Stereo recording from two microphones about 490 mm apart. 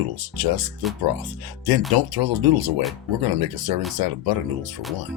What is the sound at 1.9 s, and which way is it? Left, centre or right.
Speech, right.